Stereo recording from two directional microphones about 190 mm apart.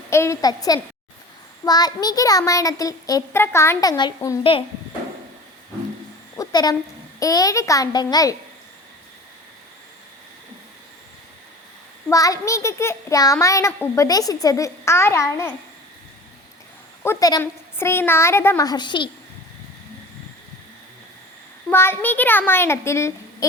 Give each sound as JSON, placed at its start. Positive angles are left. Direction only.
{"t": 0.1, "sound": "a child's voice", "side_deg": 15}
{"t": 6.3, "sound": "a sound", "side_deg": 20}
{"t": 7.2, "sound": "a child's voice", "side_deg": 20}
{"t": 12.0, "sound": "a child's voice", "side_deg": 15}
{"t": 17.0, "sound": "a child's voice", "side_deg": 15}
{"t": 21.7, "sound": "a child's voice", "side_deg": 10}